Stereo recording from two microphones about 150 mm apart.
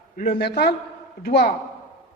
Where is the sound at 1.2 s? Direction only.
70° left (ahead or behind).